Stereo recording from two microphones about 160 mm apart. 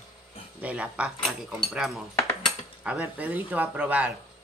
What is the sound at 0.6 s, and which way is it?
Speech, 10° right (ahead or behind).